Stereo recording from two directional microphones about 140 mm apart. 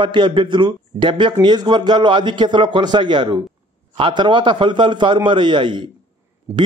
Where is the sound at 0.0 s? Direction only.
35° right (ahead or behind).